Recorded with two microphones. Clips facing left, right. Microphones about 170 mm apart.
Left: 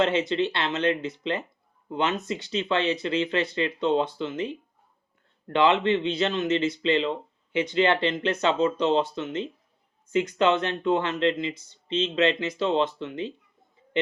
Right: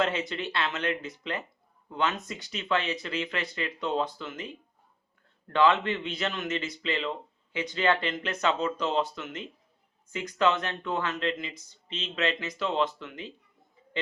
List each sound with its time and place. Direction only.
0.0 s speech: 25° left (ahead or behind)